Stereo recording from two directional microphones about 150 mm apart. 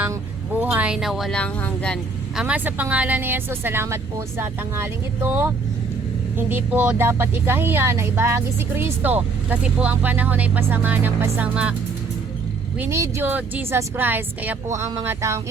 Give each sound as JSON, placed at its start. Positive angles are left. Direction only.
{"t": 0.5, "sound": "speech", "side_deg": -10}
{"t": 2.3, "sound": "speech", "side_deg": -10}
{"t": 12.8, "sound": "speech", "side_deg": -15}
{"t": 14.8, "sound": "music", "side_deg": -20}